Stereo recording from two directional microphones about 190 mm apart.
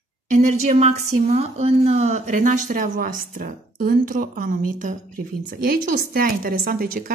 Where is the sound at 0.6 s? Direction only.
35° right (ahead or behind).